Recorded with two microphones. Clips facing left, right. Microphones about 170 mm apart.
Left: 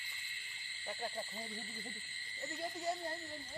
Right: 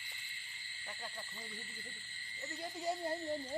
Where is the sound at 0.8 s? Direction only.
30° left (ahead or behind).